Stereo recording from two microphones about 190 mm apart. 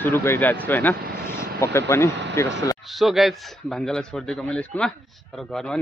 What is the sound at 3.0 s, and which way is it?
Speech, centre (ahead or behind).